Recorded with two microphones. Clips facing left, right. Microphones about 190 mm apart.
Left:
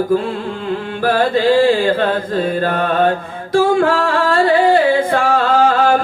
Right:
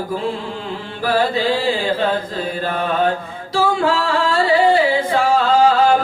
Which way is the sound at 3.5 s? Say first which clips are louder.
Left 4 dB; 55° left (ahead or behind).